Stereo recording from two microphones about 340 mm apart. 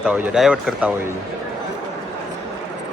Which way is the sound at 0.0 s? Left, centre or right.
Centre.